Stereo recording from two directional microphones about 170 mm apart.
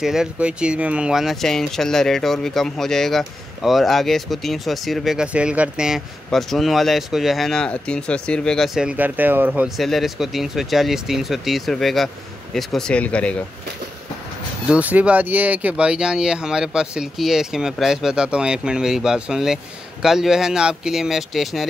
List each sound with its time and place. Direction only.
0.0 s speech: 5° right (ahead or behind)
14.7 s speech: 10° right (ahead or behind)